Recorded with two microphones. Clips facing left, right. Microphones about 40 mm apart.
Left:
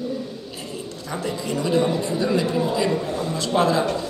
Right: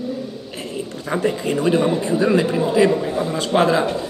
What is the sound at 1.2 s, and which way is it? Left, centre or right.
A man's voice, right.